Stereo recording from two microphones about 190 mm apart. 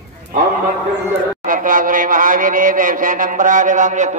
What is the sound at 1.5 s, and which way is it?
A man's voice, 45° right (ahead or behind).